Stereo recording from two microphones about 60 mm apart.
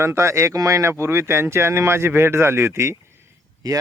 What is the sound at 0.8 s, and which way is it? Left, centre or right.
Speech, right.